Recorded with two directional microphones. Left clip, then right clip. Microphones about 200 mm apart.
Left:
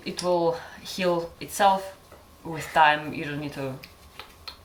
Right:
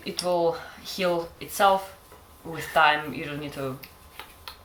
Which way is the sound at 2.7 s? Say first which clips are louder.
Left 1 dB; 10° left (ahead or behind).